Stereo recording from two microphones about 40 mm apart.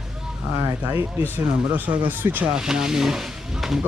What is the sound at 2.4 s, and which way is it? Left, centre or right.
Speech, centre.